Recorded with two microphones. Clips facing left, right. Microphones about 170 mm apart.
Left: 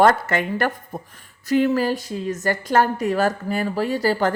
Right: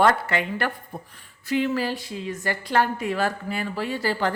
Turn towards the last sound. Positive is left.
turn(degrees=40)  # may be behind; listen again after turning